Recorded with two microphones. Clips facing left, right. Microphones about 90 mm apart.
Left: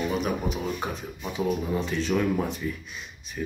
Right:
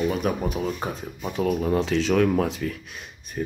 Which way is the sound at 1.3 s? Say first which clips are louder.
Right 4 dB; 75° right (ahead or behind).